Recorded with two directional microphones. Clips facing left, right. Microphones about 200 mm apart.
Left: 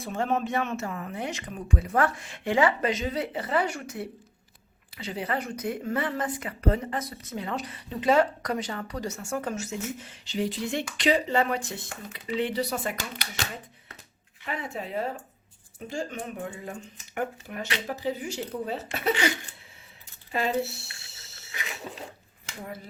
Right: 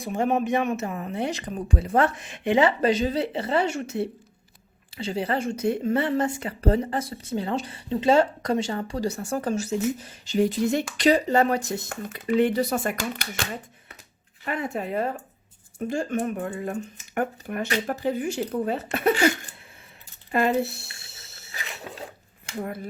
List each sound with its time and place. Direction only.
0.0 s speech: 15° right (ahead or behind); by 13.4 s 50° right (ahead or behind)
14.4 s speech: 50° right (ahead or behind)
20.3 s speech: 55° right (ahead or behind)